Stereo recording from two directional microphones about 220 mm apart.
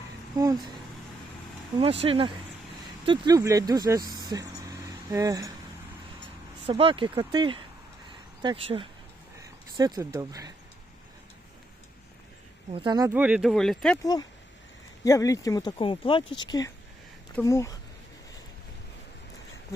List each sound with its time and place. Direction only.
0.3 s speech: 15° right (ahead or behind)
1.8 s speech: 25° right (ahead or behind)
6.7 s speech: 25° right (ahead or behind)
12.7 s speech: 20° right (ahead or behind); by 14.0 s 5° left (ahead or behind)
14.0 s speech: 15° left (ahead or behind)